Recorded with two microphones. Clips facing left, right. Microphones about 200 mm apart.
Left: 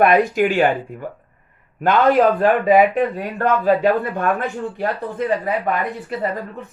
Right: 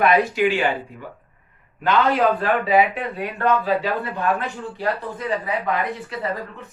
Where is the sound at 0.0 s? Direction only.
45° left (ahead or behind).